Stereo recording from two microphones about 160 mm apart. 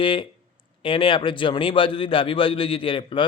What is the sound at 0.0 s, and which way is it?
A man's voice, 30° left (ahead or behind).